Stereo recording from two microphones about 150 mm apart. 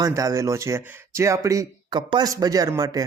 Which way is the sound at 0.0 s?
20° right (ahead or behind).